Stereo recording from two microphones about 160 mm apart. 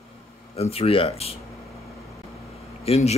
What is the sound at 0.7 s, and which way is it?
Speech, 35° left (ahead or behind).